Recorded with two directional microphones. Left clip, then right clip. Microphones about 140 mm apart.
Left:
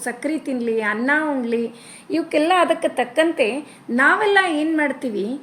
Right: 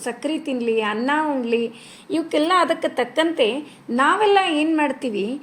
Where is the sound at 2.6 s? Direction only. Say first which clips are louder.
Left 2 dB; 25° right (ahead or behind).